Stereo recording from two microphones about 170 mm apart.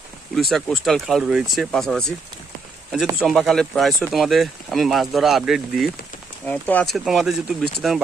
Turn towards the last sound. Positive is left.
turn(degrees=0)  # may be behind; listen again after turning